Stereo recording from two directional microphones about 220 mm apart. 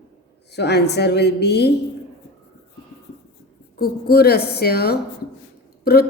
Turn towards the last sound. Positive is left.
turn(degrees=45)  # may be behind; listen again after turning